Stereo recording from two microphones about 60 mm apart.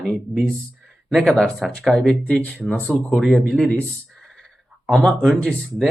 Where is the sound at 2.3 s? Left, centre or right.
Centre.